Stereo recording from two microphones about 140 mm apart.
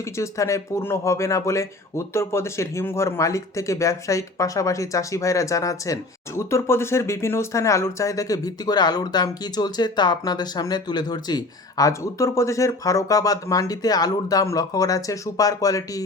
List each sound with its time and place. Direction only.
0.2 s speech: 20° left (ahead or behind)